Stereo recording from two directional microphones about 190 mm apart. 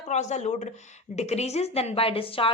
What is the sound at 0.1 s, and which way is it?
A woman's voice, 35° left (ahead or behind).